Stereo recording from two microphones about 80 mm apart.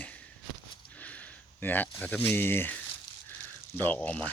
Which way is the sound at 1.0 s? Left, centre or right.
Centre.